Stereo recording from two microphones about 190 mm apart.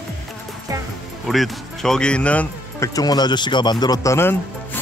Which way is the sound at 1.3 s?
Centre (ahead or behind).